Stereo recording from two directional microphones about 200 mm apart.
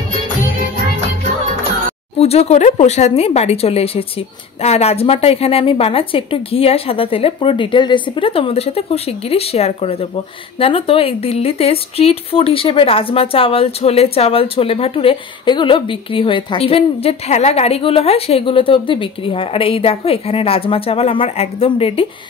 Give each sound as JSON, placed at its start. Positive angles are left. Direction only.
{"t": 2.1, "sound": "a woman's voice", "side_deg": 30}